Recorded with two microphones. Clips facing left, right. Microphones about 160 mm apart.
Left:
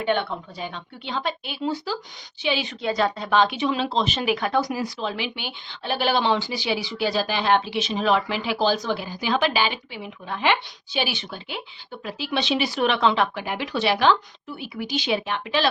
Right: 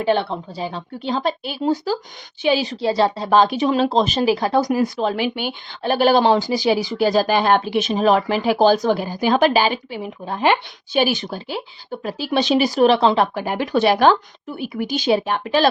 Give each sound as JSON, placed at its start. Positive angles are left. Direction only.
{"t": 0.0, "sound": "a woman's voice", "side_deg": -35}
{"t": 4.7, "sound": "speech", "side_deg": -50}